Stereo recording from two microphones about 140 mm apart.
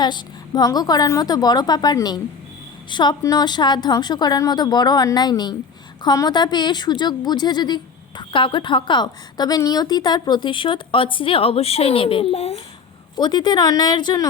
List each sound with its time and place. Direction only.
0.0 s a woman's voice: 30° left (ahead or behind)
13.1 s a woman's voice: 30° left (ahead or behind)